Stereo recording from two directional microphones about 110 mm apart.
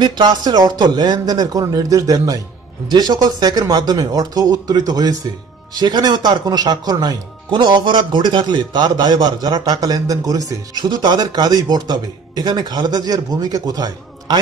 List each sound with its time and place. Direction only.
0.0 s speech: 40° right (ahead or behind)